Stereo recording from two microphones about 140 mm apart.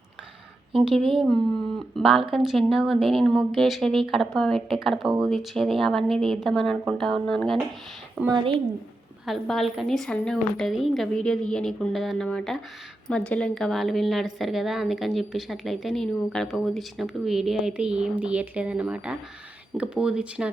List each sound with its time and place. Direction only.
0.9 s a woman's voice: centre (ahead or behind)
8.3 s a woman's voice: 35° right (ahead or behind)
9.2 s a woman's voice: centre (ahead or behind)